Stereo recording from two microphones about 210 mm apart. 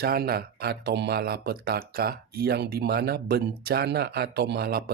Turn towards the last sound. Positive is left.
turn(degrees=-50)  # may be behind; listen again after turning